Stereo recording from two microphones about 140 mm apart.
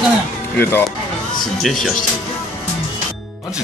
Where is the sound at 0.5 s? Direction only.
15° left (ahead or behind).